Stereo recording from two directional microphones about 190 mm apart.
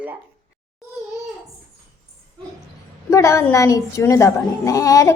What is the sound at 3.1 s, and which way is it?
A woman's voice, 15° left (ahead or behind).